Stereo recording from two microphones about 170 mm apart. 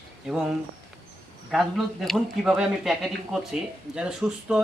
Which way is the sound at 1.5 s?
Centre (ahead or behind).